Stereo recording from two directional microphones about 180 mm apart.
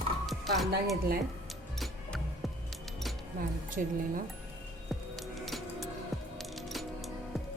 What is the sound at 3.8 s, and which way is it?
Speech, 50° right (ahead or behind).